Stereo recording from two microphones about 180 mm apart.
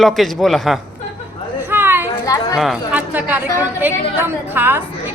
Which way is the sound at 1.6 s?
10° right (ahead or behind).